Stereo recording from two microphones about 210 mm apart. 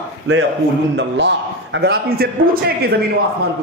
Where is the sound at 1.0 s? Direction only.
55° right (ahead or behind).